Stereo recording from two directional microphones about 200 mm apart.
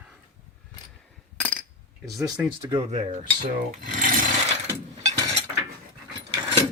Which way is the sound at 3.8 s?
45° right (ahead or behind).